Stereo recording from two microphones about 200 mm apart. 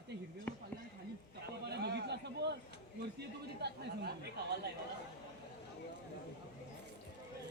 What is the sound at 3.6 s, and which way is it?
Chatter, 55° right (ahead or behind).